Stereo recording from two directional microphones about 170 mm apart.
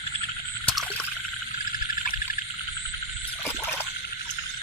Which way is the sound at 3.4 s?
15° left (ahead or behind).